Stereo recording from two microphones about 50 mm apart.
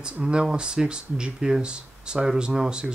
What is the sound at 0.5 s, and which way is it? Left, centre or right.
Speech, centre.